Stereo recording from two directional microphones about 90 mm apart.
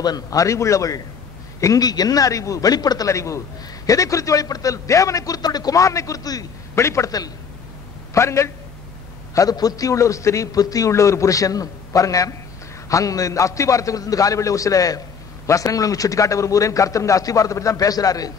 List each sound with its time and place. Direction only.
0.0 s a man's voice: 45° left (ahead or behind)